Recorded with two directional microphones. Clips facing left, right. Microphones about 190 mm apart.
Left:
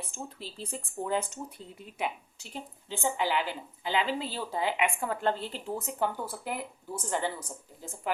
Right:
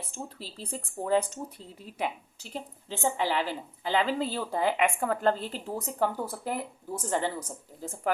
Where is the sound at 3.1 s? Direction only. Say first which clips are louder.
Even; 35° right (ahead or behind).